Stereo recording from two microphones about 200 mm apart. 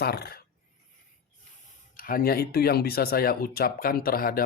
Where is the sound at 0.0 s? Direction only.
50° left (ahead or behind).